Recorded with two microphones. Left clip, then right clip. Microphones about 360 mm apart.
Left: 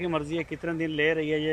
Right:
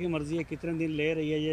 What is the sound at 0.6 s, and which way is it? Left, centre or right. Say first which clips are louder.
Speech: left 2 dB; left.